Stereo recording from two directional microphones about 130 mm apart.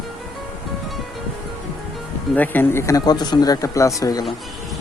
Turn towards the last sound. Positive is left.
turn(degrees=30)  # may be behind; listen again after turning